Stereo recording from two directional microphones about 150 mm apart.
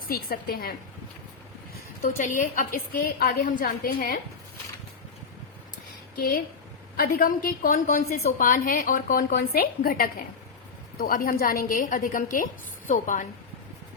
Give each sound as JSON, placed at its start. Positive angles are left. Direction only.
{"t": 0.1, "sound": "a woman's voice", "side_deg": 85}
{"t": 2.0, "sound": "a woman's voice", "side_deg": 60}
{"t": 6.9, "sound": "a woman's voice", "side_deg": 75}
{"t": 10.9, "sound": "a woman's voice", "side_deg": 70}